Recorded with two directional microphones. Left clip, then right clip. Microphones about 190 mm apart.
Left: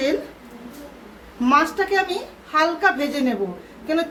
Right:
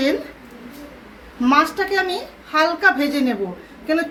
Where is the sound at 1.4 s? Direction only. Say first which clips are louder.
Right 1 dB; 15° right (ahead or behind).